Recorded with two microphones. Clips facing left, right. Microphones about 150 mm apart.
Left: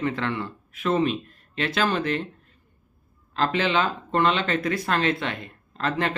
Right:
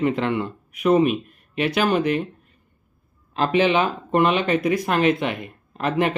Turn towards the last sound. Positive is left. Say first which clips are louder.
# right 4 dB
turn(degrees=-15)  # may be behind; listen again after turning